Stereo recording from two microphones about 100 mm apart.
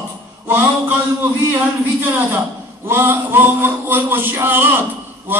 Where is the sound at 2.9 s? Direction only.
20° right (ahead or behind).